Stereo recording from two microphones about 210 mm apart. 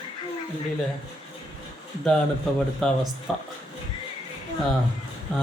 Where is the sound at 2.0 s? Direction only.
5° left (ahead or behind).